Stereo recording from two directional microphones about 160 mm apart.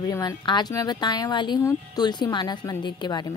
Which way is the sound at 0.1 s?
20° left (ahead or behind).